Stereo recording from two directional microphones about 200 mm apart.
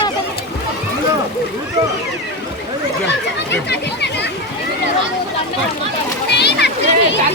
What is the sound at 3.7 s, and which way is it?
Chatter, 55° left (ahead or behind).